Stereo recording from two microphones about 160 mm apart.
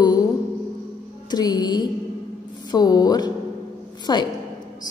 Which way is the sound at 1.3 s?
25° left (ahead or behind).